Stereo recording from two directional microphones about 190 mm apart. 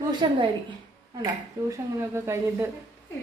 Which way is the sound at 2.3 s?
15° right (ahead or behind).